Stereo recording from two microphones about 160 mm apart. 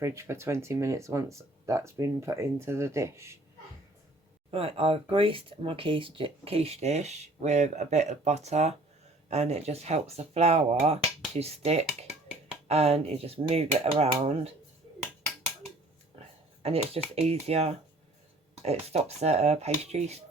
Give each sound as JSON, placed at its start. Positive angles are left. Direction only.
{"t": 0.0, "sound": "speech", "side_deg": -15}
{"t": 4.5, "sound": "speech", "side_deg": -35}
{"t": 16.6, "sound": "speech", "side_deg": -40}